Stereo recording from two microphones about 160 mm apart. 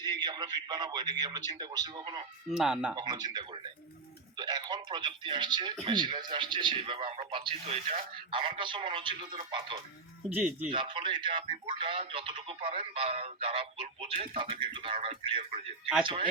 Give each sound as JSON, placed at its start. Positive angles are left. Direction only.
{"t": 0.0, "sound": "a man's voice", "side_deg": -25}
{"t": 2.5, "sound": "speech", "side_deg": -5}
{"t": 2.9, "sound": "a man's voice", "side_deg": -25}
{"t": 10.2, "sound": "speech", "side_deg": -10}
{"t": 10.7, "sound": "a man's voice", "side_deg": -30}